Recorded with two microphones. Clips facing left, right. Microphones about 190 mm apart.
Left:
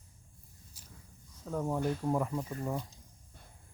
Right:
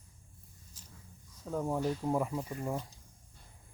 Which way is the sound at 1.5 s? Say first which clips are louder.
Even; 5° right (ahead or behind).